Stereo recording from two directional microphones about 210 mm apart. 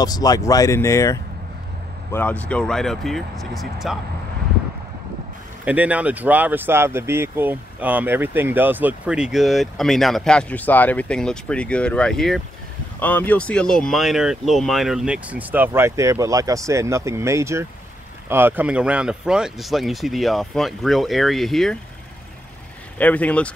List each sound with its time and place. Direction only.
0.0 s speech: 20° left (ahead or behind); by 4.0 s centre (ahead or behind)
5.7 s speech: 5° right (ahead or behind)
22.9 s speech: 5° left (ahead or behind)